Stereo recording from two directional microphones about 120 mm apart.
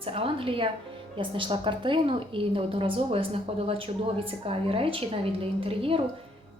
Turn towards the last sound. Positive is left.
turn(degrees=-50)  # may be behind; listen again after turning